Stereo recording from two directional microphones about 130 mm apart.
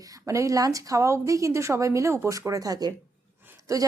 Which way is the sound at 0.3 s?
25° right (ahead or behind).